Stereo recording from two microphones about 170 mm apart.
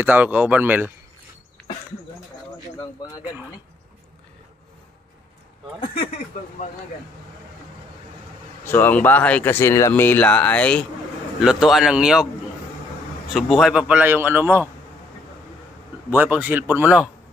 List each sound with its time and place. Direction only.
0.0 s a man's voice: 10° right (ahead or behind)
8.6 s speech: 10° left (ahead or behind)
13.3 s a man's voice: centre (ahead or behind)
16.1 s a man's voice: 10° right (ahead or behind)